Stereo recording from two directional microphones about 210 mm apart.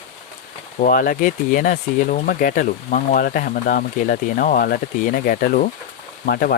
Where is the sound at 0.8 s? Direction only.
40° left (ahead or behind).